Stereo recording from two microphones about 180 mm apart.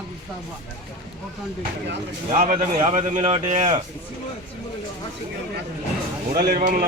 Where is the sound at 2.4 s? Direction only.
45° right (ahead or behind).